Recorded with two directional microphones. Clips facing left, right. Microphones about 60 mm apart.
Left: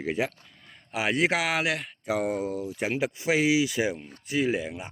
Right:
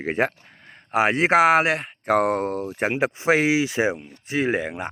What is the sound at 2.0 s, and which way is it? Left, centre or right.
Speech, right.